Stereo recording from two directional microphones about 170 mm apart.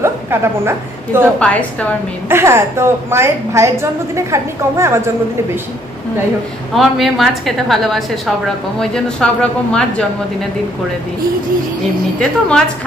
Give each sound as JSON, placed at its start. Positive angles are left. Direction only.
{"t": 0.0, "sound": "a woman's voice", "side_deg": -15}
{"t": 1.4, "sound": "a woman's voice", "side_deg": 10}
{"t": 2.2, "sound": "a woman's voice", "side_deg": -15}
{"t": 6.7, "sound": "a woman's voice", "side_deg": 0}
{"t": 12.2, "sound": "a woman's voice", "side_deg": 5}